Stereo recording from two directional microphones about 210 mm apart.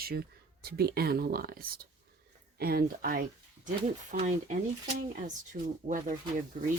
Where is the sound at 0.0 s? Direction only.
45° right (ahead or behind).